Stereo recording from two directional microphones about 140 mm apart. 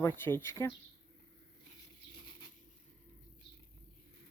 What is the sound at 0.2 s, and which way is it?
Speech, 15° left (ahead or behind).